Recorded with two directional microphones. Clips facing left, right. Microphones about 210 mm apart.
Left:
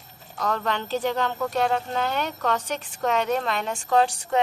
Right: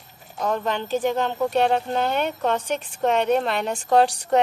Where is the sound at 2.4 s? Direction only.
30° right (ahead or behind).